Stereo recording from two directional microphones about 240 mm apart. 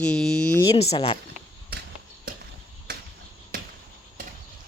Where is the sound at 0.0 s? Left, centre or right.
Centre.